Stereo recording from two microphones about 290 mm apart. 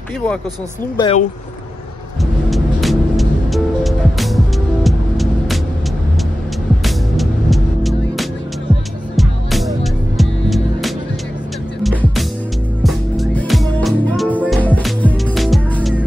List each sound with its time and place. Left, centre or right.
0.9 s speech: centre
2.5 s music: centre
4.8 s vehicle: centre
6.8 s music: centre